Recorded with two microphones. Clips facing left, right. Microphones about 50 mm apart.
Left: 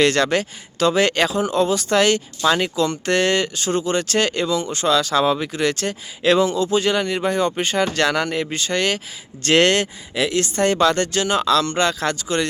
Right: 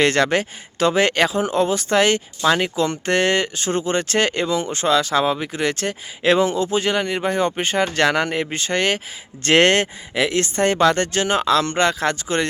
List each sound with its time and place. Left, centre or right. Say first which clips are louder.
0.0 s speech: even; right